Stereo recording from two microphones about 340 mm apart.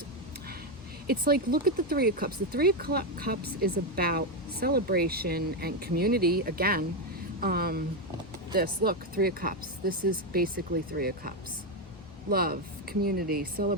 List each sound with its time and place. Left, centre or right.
1.0 s speech: right